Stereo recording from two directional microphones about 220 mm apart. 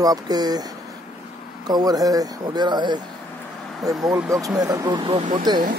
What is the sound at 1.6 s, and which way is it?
Speech, 20° right (ahead or behind).